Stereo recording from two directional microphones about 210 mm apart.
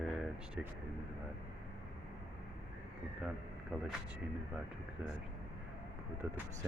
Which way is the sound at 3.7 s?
5° right (ahead or behind).